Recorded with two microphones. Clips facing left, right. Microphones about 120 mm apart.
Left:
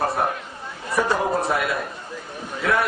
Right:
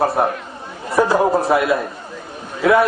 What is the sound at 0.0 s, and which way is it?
A man's voice, centre (ahead or behind).